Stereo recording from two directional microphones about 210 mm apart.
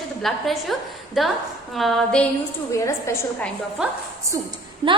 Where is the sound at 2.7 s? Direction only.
15° left (ahead or behind).